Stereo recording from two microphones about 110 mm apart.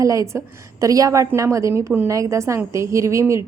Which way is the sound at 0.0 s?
30° right (ahead or behind).